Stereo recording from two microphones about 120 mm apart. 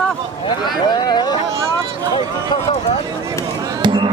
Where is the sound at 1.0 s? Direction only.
35° left (ahead or behind).